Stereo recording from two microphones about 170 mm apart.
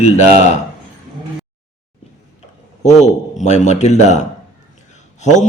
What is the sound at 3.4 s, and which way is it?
A man's voice, 45° left (ahead or behind).